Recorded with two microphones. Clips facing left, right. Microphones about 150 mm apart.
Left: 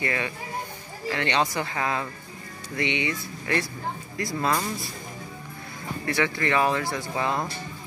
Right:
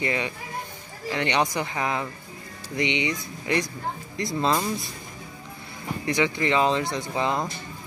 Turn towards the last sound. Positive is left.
turn(degrees=-20)  # may be behind; listen again after turning